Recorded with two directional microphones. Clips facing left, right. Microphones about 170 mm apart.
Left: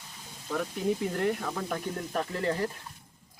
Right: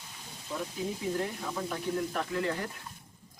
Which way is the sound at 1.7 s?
35° left (ahead or behind).